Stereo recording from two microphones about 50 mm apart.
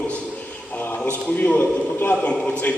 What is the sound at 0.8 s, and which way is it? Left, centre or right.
A man's voice, left.